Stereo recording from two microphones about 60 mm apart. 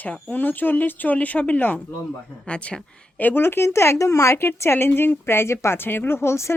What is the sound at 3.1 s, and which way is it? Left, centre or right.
Speech, left.